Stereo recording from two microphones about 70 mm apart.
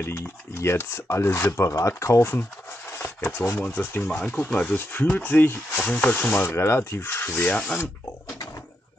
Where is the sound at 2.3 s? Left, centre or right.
Left.